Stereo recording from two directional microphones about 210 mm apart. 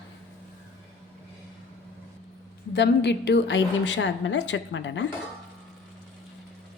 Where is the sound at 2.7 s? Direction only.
55° left (ahead or behind).